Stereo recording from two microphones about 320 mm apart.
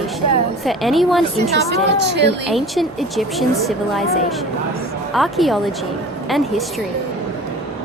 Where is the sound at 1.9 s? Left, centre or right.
Right.